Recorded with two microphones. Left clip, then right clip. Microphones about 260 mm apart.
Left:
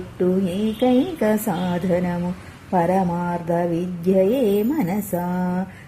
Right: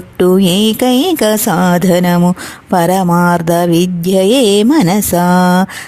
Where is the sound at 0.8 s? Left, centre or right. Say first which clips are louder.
Right 5 dB; right.